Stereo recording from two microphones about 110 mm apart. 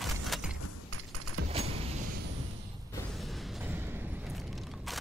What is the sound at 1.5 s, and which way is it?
Keys jangling, 65° right (ahead or behind).